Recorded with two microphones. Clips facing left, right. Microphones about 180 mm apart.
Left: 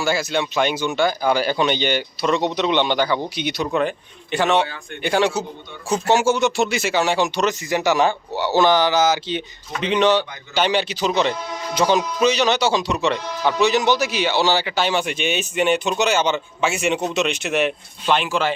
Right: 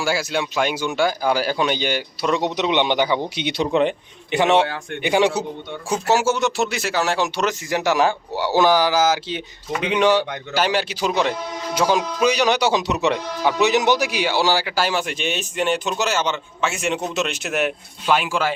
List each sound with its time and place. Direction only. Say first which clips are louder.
0.0 s speech: left 1 dB; 10° right (ahead or behind)
5.9 s speech: left 2 dB; 5° right (ahead or behind)